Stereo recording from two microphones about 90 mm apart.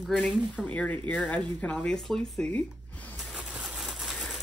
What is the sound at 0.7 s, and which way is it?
Speech, 15° left (ahead or behind).